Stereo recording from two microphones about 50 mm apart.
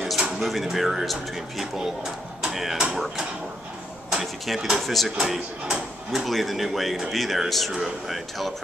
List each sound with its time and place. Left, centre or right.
0.4 s speech: centre